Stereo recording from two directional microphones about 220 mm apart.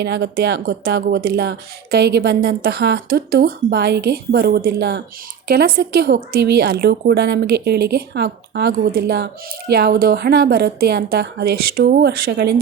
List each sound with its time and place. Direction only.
0.0 s speech: 45° right (ahead or behind)